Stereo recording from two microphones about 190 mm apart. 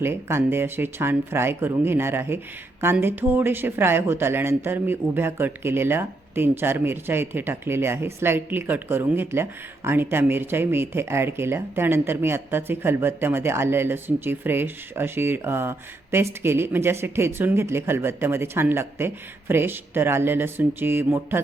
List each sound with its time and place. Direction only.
0.0 s speech: 10° right (ahead or behind)